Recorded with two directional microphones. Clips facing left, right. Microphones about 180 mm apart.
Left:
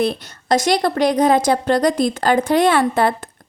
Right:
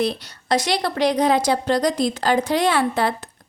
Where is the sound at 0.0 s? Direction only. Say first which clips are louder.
Left 3 dB; 50° left (ahead or behind).